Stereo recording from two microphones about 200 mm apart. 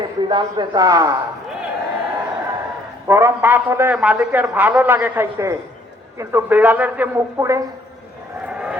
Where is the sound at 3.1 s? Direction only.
10° right (ahead or behind).